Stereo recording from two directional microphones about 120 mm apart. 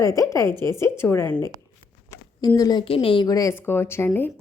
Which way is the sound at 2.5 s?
30° left (ahead or behind).